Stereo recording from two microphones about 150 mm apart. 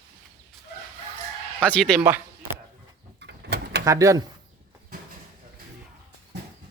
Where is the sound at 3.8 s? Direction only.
20° right (ahead or behind).